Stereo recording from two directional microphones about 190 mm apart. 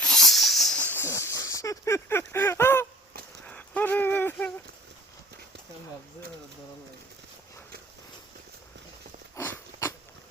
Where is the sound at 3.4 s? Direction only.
5° left (ahead or behind).